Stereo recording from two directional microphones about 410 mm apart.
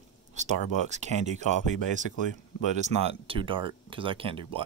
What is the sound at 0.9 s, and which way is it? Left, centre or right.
Speech, centre.